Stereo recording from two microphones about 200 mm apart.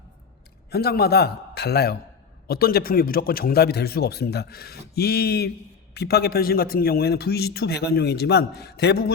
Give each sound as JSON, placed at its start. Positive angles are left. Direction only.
{"t": 0.7, "sound": "a man's voice", "side_deg": 50}